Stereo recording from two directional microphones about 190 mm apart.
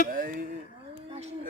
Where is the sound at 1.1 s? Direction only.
35° right (ahead or behind).